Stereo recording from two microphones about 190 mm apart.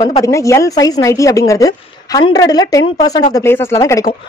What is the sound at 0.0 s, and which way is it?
A woman's voice, 20° left (ahead or behind).